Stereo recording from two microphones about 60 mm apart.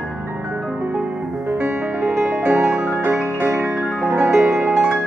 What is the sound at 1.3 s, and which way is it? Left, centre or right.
Music, right.